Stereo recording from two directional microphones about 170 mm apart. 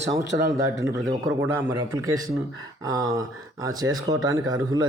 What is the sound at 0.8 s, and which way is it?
Speech, 20° right (ahead or behind).